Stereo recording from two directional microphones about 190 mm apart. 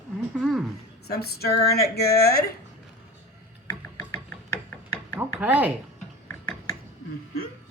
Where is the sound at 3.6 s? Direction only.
15° left (ahead or behind).